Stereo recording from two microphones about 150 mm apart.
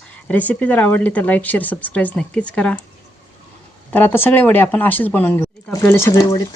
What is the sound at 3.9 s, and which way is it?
Speech, 15° left (ahead or behind).